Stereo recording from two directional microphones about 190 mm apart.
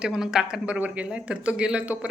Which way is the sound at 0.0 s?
5° right (ahead or behind).